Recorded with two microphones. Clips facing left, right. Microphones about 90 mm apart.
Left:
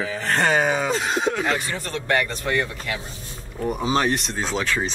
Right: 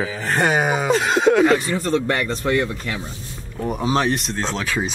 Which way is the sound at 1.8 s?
30° right (ahead or behind).